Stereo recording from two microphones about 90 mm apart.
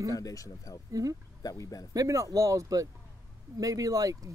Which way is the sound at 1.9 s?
40° right (ahead or behind).